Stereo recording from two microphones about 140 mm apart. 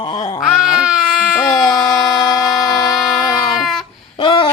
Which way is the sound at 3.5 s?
Centre (ahead or behind).